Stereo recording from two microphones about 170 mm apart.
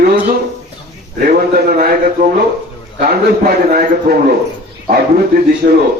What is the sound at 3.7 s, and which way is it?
Speech, 60° right (ahead or behind).